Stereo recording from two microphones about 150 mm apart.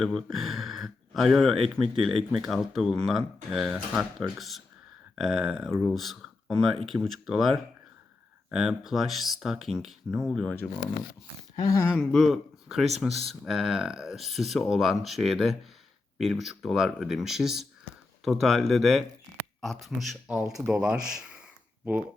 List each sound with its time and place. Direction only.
0.0 s speech: 5° left (ahead or behind)
11.5 s speech: 20° left (ahead or behind)
11.9 s speech: 5° left (ahead or behind)